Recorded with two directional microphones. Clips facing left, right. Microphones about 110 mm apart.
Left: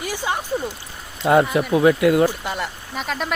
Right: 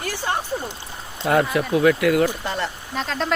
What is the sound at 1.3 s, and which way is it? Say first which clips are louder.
Speech: left 3 dB; 25° left (ahead or behind).